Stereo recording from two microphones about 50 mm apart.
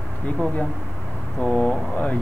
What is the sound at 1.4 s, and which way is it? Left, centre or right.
Speech, left.